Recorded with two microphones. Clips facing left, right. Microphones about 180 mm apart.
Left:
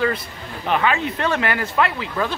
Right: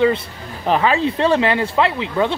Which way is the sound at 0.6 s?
35° right (ahead or behind).